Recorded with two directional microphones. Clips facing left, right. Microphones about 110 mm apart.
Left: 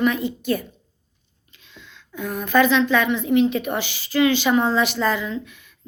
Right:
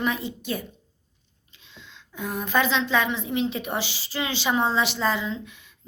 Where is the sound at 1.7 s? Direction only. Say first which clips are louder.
Left 6 dB; 20° right (ahead or behind).